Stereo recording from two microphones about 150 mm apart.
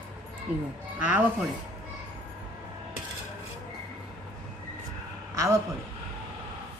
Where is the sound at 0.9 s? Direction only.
10° right (ahead or behind).